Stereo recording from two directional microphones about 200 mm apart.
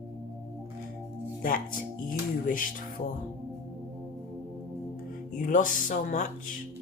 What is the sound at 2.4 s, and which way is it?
Speech, 45° left (ahead or behind).